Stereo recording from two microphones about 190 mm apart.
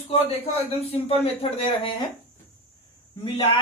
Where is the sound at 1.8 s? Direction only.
25° left (ahead or behind).